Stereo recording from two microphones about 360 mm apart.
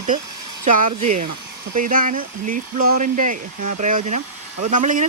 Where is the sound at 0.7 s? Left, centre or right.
Right.